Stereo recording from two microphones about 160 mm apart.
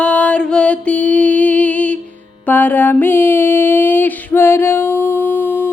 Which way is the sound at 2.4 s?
10° left (ahead or behind).